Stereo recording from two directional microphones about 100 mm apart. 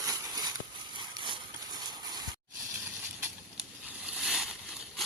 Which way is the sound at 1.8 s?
40° right (ahead or behind).